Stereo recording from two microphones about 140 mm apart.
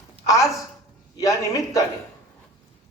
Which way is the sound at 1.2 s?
25° left (ahead or behind).